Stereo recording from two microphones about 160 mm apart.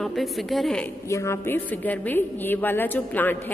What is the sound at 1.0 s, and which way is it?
A woman's voice, 15° left (ahead or behind).